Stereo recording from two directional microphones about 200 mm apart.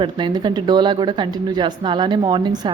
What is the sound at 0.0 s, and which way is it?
A woman's voice, 20° right (ahead or behind).